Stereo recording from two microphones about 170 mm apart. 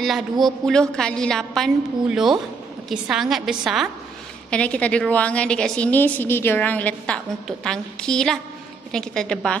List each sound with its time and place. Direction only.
0.0 s a woman's voice: centre (ahead or behind)
4.5 s a woman's voice: 5° left (ahead or behind)